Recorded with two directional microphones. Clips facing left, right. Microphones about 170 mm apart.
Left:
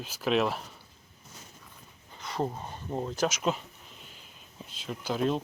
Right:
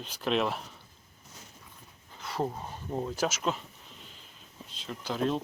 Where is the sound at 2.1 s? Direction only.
Centre (ahead or behind).